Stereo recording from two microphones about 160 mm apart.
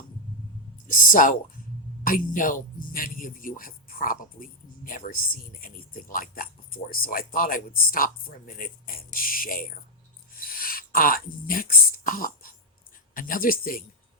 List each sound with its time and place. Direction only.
1.1 s a man's voice: 55° left (ahead or behind)
10.3 s a sound: 65° left (ahead or behind)
13.1 s a man's voice: 60° left (ahead or behind)